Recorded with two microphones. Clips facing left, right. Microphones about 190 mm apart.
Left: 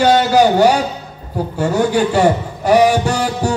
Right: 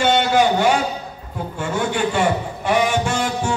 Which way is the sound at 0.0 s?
40° left (ahead or behind).